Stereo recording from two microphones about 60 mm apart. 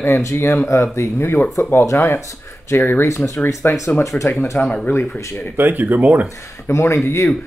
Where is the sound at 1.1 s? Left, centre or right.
Left.